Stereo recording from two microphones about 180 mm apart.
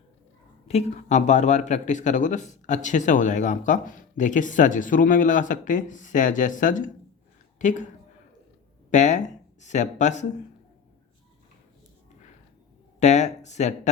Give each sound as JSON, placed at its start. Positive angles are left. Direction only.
{"t": 0.7, "sound": "speech", "side_deg": 35}
{"t": 8.9, "sound": "speech", "side_deg": 40}
{"t": 13.0, "sound": "speech", "side_deg": 40}